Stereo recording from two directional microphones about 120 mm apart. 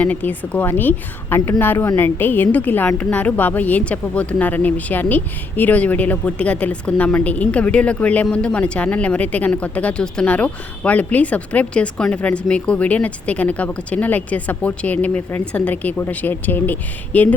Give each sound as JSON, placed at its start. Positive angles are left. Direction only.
{"t": 0.0, "sound": "a woman's voice", "side_deg": 15}